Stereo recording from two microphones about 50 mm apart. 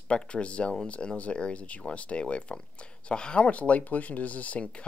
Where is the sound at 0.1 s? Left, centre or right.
Left.